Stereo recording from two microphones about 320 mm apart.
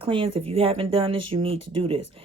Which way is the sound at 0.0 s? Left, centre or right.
Centre.